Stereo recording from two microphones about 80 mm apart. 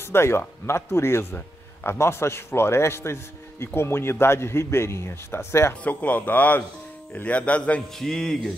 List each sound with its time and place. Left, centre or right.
0.0 s speech: left
5.9 s speech: centre